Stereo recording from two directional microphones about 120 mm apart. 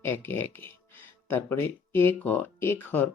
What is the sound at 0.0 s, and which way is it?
Speech, 15° left (ahead or behind).